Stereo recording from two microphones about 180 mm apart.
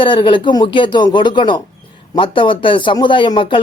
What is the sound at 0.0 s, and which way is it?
Speech, 25° left (ahead or behind).